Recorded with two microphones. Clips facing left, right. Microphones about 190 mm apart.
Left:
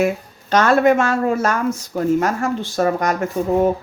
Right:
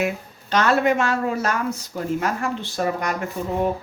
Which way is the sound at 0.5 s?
45° left (ahead or behind).